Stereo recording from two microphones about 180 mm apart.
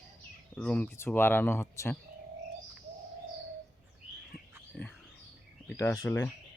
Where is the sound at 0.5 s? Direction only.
5° left (ahead or behind).